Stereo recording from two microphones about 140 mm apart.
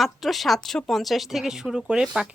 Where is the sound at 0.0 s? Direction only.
Centre (ahead or behind).